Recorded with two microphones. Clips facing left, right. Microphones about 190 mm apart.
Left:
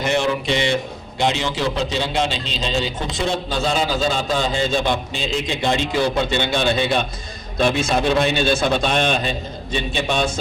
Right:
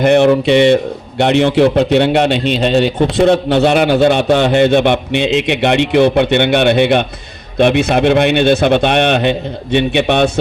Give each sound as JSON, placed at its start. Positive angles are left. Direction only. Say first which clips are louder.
{"t": 0.0, "sound": "a man's voice", "louder": "right 11 dB", "side_deg": -60}